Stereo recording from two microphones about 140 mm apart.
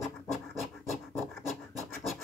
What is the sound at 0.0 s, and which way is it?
Scratch, centre (ahead or behind).